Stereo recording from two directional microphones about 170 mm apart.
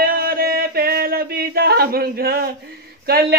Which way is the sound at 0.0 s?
60° right (ahead or behind).